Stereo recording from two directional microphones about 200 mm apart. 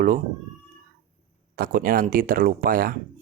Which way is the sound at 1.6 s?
45° right (ahead or behind).